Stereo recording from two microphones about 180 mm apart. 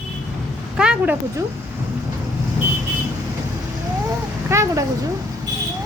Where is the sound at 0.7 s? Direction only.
5° right (ahead or behind).